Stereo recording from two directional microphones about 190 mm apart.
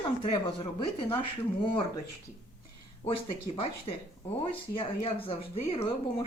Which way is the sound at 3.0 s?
30° left (ahead or behind).